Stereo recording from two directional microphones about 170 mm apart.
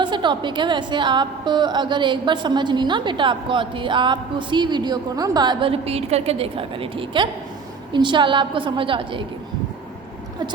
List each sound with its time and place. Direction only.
0.0 s a woman's voice: 25° right (ahead or behind)